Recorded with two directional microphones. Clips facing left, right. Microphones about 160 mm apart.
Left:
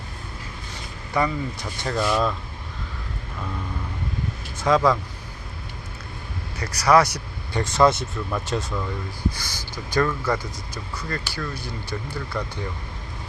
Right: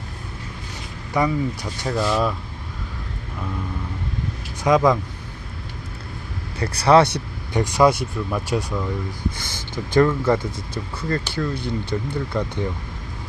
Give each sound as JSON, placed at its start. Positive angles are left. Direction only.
{"t": 1.1, "sound": "speech", "side_deg": -10}
{"t": 4.6, "sound": "speech", "side_deg": -20}
{"t": 6.6, "sound": "speech", "side_deg": -30}
{"t": 7.5, "sound": "speech", "side_deg": -15}
{"t": 9.3, "sound": "speech", "side_deg": -25}